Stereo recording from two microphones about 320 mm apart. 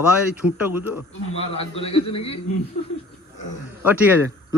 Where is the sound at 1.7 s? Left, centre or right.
Centre.